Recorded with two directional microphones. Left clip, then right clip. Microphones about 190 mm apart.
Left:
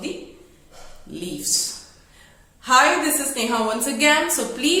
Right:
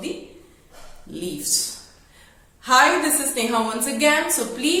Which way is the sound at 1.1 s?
10° left (ahead or behind).